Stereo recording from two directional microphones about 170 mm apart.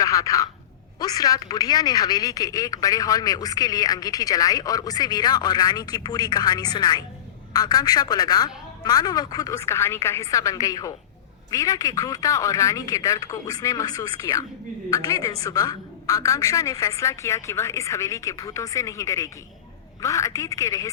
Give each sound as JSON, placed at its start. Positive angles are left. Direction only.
{"t": 0.0, "sound": "speech", "side_deg": 20}